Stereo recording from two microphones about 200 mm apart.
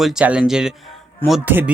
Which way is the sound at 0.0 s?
5° right (ahead or behind).